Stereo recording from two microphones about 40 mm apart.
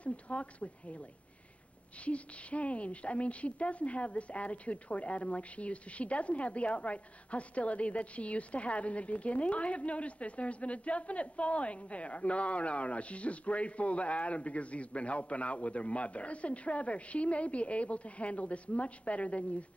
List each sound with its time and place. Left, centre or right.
0.0 s a woman's voice: left
2.0 s a woman's voice: left